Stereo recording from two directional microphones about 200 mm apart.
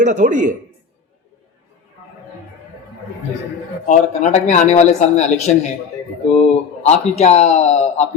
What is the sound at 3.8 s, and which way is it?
Speech, 35° left (ahead or behind).